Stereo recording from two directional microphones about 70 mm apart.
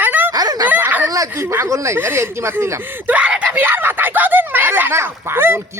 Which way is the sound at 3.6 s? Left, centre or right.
Right.